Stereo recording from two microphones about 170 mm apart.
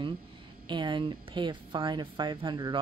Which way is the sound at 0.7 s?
30° right (ahead or behind).